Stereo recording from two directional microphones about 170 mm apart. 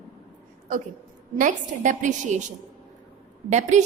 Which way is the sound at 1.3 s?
50° right (ahead or behind).